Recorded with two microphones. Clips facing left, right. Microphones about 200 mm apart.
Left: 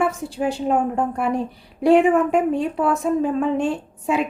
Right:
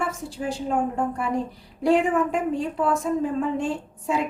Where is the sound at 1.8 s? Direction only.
65° left (ahead or behind).